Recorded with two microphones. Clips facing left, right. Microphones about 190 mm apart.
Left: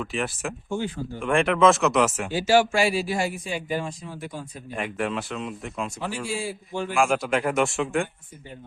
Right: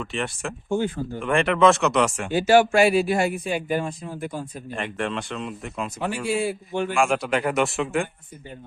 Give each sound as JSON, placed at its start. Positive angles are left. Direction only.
{"t": 0.0, "sound": "speech", "side_deg": 5}
{"t": 0.7, "sound": "speech", "side_deg": -50}
{"t": 1.2, "sound": "speech", "side_deg": 0}
{"t": 2.3, "sound": "speech", "side_deg": -55}
{"t": 4.7, "sound": "speech", "side_deg": 5}
{"t": 6.2, "sound": "speech", "side_deg": -60}
{"t": 6.9, "sound": "speech", "side_deg": 0}